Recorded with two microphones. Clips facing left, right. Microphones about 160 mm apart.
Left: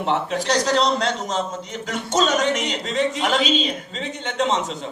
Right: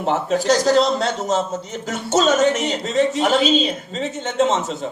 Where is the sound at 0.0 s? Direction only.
40° right (ahead or behind).